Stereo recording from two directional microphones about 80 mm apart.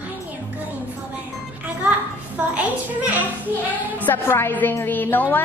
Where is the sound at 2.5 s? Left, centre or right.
Centre.